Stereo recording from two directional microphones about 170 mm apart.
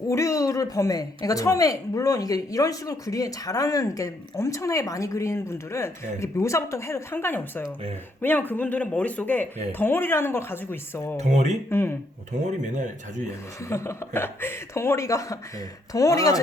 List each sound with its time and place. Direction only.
0.1 s speech: 20° left (ahead or behind)
11.2 s speech: 40° right (ahead or behind)
11.7 s speech: 15° left (ahead or behind)
12.6 s speech: 45° right (ahead or behind)
13.7 s speech: 15° left (ahead or behind)